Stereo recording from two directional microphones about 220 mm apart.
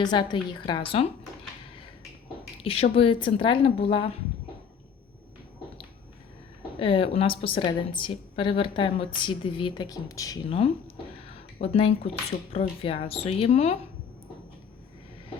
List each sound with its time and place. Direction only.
0.0 s a woman's voice: 20° left (ahead or behind)
2.6 s a woman's voice: 25° left (ahead or behind)
6.7 s a woman's voice: 25° left (ahead or behind)